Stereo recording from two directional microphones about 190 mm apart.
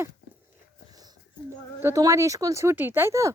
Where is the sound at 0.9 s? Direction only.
20° right (ahead or behind).